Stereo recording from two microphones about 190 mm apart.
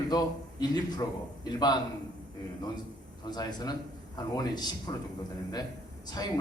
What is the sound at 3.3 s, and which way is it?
A man's voice, 20° left (ahead or behind).